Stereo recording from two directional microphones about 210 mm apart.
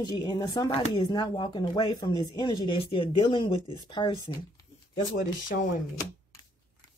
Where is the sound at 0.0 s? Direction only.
20° left (ahead or behind).